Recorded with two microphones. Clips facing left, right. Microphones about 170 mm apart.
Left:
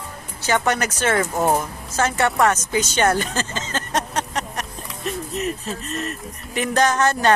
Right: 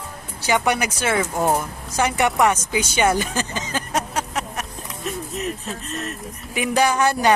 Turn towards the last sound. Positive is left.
turn(degrees=-10)  # may be behind; listen again after turning